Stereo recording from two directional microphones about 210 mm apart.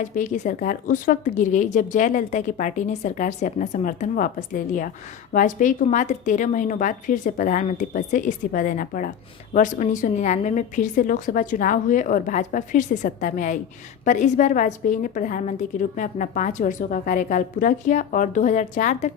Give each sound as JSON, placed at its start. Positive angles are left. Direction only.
{"t": 0.1, "sound": "a woman's voice", "side_deg": 40}